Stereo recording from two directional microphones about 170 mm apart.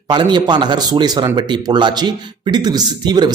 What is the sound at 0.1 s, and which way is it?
Speech, 25° right (ahead or behind).